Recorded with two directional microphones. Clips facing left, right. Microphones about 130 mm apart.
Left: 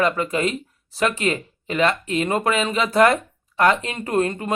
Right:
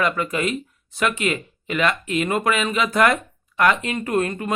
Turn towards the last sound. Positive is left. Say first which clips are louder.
# left 1 dB
turn(degrees=25)  # may be behind; listen again after turning